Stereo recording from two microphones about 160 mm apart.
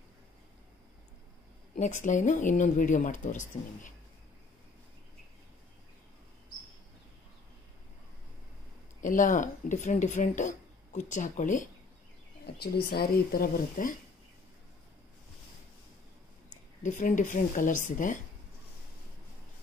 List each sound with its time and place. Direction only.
1.8 s speech: 50° left (ahead or behind)
9.0 s speech: 55° left (ahead or behind)
12.8 s speech: 75° left (ahead or behind)
16.8 s speech: 55° left (ahead or behind)